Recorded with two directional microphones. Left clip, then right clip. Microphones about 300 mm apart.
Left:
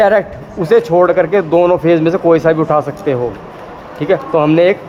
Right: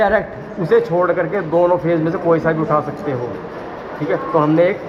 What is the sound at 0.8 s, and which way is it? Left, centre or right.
Speech, left.